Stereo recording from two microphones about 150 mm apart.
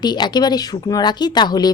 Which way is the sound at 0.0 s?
30° left (ahead or behind).